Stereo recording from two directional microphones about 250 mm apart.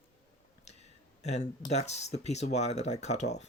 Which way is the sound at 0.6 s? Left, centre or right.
Left.